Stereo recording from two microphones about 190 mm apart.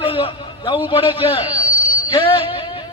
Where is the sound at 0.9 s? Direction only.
25° left (ahead or behind).